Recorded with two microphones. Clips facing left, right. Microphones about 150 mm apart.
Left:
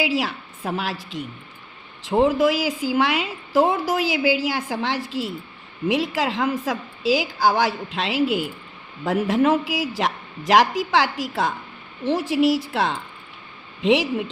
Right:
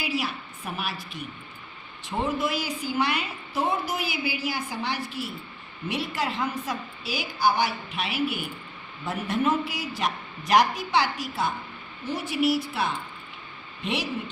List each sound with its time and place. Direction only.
0.0 s a woman's voice: 90° left